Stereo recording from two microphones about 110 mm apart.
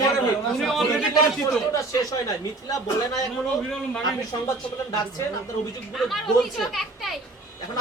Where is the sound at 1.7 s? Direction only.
35° left (ahead or behind).